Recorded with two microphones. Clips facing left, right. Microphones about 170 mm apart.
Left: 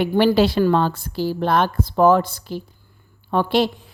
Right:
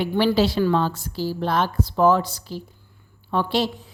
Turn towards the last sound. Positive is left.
turn(degrees=55)  # may be behind; listen again after turning